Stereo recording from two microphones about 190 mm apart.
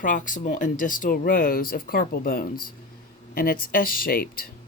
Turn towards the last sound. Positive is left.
turn(degrees=50)  # may be behind; listen again after turning